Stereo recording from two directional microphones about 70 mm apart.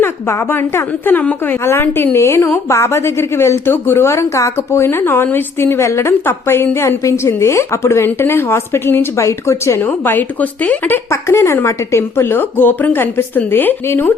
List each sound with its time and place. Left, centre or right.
0.0 s a woman's voice: left
1.2 s a woman's voice: left
1.6 s a woman's voice: left
9.8 s a woman's voice: left
11.1 s a woman's voice: left